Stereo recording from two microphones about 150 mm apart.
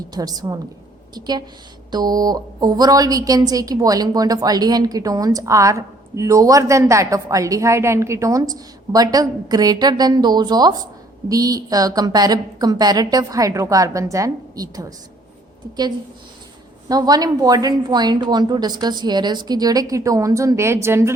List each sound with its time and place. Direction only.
0.1 s a woman's voice: 25° right (ahead or behind)
16.9 s a woman's voice: 25° right (ahead or behind)